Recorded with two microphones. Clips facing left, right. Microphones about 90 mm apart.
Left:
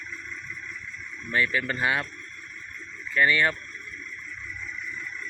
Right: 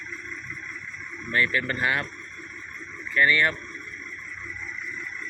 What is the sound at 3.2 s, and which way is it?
Speech, 25° left (ahead or behind).